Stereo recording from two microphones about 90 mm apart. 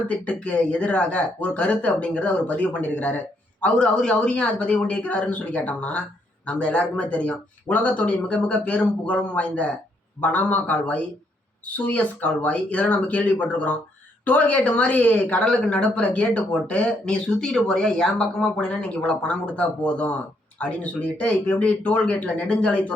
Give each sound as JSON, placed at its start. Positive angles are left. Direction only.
{"t": 0.1, "sound": "a woman's voice", "side_deg": 15}